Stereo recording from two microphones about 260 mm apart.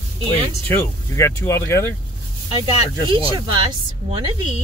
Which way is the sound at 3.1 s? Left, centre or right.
Centre.